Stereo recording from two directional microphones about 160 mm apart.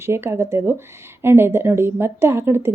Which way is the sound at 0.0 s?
15° right (ahead or behind).